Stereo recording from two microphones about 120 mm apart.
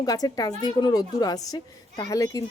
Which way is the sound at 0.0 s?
30° left (ahead or behind).